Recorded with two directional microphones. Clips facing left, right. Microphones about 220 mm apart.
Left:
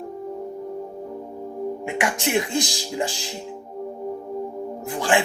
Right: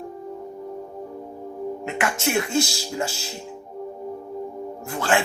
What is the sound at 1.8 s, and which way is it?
Speech, 15° left (ahead or behind).